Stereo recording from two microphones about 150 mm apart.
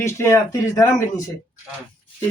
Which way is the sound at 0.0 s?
20° left (ahead or behind).